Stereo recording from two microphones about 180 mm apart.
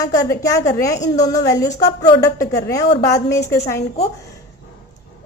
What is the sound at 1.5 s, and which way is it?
A woman's voice, 20° left (ahead or behind).